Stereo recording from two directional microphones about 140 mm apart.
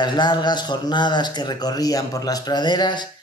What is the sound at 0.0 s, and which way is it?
Speech, 35° left (ahead or behind).